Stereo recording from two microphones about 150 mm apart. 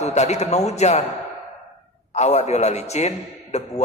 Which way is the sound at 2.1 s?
45° left (ahead or behind).